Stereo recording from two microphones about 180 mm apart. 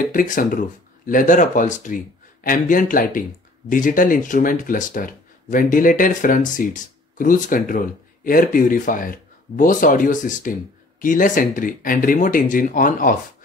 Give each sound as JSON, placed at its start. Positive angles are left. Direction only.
{"t": 0.1, "sound": "speech", "side_deg": 50}